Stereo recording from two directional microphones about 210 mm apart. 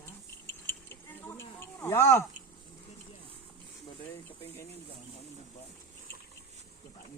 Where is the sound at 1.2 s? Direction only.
10° left (ahead or behind).